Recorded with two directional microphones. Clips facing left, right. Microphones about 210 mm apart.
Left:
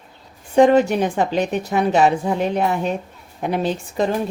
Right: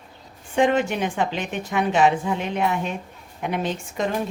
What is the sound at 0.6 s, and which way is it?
A woman's voice, 40° left (ahead or behind).